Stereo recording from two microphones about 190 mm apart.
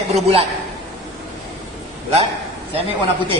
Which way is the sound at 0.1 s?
35° right (ahead or behind).